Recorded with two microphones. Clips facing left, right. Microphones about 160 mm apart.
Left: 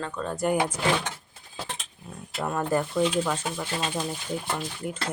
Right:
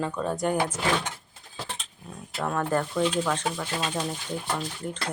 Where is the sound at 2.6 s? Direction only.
10° left (ahead or behind).